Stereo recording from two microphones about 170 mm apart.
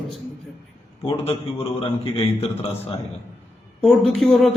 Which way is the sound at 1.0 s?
35° left (ahead or behind).